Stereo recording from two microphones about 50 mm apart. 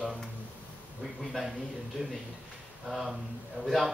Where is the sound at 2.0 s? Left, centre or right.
Right.